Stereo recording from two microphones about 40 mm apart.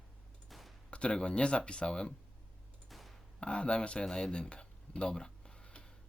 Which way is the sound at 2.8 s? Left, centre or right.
Centre.